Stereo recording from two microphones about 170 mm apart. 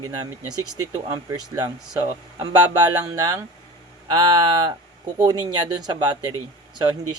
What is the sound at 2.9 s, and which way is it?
Speech, 20° right (ahead or behind).